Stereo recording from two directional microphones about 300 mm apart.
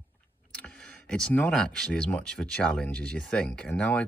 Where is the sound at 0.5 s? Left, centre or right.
Centre.